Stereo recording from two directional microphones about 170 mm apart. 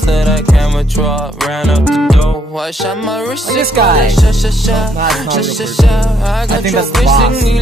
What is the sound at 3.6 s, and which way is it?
Music, 65° right (ahead or behind).